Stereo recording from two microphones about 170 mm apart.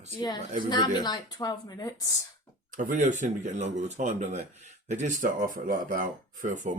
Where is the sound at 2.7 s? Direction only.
50° right (ahead or behind).